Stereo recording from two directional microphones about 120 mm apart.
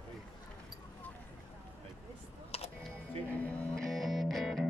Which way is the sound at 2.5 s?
60° left (ahead or behind).